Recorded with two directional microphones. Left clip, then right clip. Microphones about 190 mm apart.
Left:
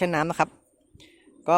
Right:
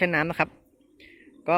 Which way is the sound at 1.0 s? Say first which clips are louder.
Left 1 dB; 15° left (ahead or behind).